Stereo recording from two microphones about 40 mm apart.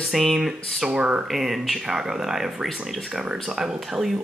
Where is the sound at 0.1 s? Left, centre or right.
Centre.